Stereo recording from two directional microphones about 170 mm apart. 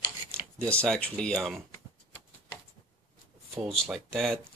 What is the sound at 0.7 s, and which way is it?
Speech, 5° left (ahead or behind).